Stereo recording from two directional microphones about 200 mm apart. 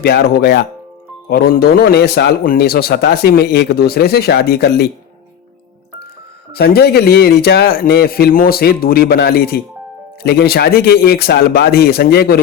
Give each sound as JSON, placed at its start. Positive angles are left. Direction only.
{"t": 0.0, "sound": "a man's voice", "side_deg": 55}
{"t": 6.5, "sound": "a man's voice", "side_deg": 50}